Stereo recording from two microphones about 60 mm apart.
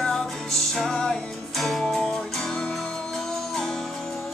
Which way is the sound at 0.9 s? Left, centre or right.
Centre.